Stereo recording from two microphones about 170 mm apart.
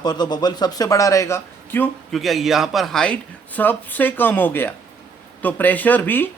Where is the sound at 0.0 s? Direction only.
25° left (ahead or behind).